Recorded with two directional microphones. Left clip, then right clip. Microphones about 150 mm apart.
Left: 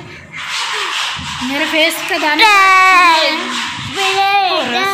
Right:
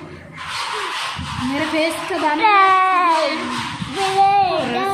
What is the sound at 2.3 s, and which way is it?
Speech, centre (ahead or behind).